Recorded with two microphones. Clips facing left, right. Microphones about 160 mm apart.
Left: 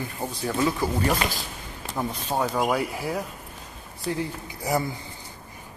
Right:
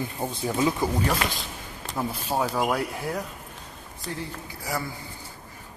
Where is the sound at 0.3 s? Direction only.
15° right (ahead or behind).